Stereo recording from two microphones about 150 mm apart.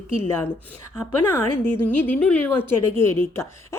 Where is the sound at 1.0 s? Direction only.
15° left (ahead or behind).